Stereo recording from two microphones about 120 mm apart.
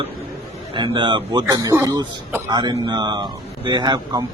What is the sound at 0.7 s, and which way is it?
A man's voice, 40° right (ahead or behind).